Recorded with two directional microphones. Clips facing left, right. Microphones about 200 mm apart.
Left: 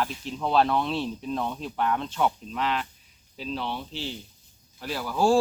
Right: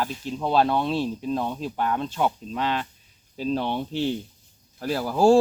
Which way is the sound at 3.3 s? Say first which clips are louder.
Right 7 dB; 45° right (ahead or behind).